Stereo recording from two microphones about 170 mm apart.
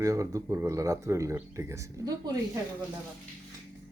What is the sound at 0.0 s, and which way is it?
Speech, 20° right (ahead or behind).